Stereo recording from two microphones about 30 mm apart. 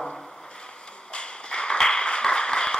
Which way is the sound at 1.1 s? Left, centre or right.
Left.